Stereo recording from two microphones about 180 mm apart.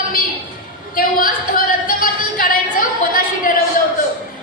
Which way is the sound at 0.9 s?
50° left (ahead or behind).